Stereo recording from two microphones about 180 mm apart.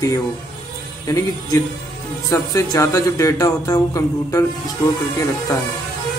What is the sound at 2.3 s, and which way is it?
Speech, 15° left (ahead or behind).